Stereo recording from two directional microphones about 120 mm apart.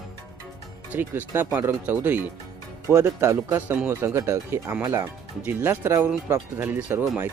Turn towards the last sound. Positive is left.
turn(degrees=-15)  # may be behind; listen again after turning